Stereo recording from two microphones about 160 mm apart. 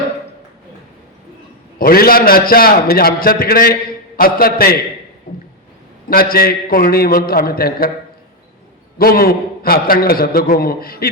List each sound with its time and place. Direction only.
1.8 s a man's voice: 65° left (ahead or behind)
6.1 s a man's voice: 65° left (ahead or behind)
9.0 s a man's voice: 70° left (ahead or behind)